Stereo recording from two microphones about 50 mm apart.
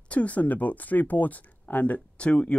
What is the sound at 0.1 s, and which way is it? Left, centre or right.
Speech, left.